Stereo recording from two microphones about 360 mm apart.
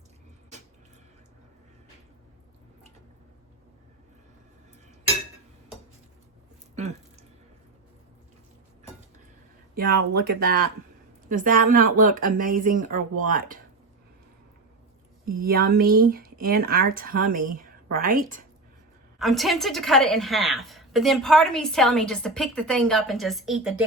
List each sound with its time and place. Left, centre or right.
6.7 s a sound: centre
10.2 s speech: right
15.2 s speech: right
19.2 s a woman's voice: centre